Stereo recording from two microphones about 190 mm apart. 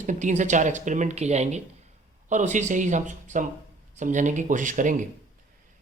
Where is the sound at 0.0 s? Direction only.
40° right (ahead or behind).